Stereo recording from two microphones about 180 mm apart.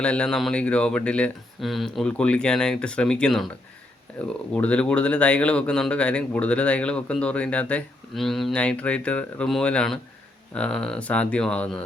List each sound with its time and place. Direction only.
0.0 s speech: 5° left (ahead or behind)